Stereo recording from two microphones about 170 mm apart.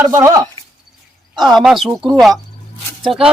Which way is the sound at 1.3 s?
Centre (ahead or behind).